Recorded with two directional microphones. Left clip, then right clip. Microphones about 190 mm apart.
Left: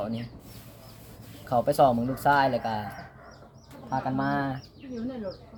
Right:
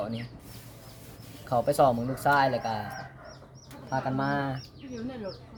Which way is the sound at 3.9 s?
Centre (ahead or behind).